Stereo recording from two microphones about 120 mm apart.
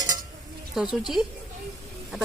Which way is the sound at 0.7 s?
5° right (ahead or behind).